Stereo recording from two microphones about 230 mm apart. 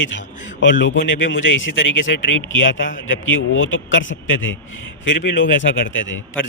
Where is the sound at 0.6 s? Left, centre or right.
Left.